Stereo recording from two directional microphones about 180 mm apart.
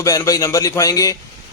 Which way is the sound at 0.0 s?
20° left (ahead or behind).